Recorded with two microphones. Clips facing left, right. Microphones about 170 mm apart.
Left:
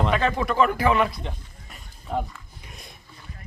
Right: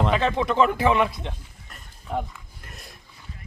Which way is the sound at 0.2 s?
25° right (ahead or behind).